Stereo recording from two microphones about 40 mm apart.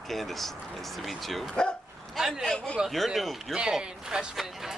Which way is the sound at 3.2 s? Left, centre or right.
Centre.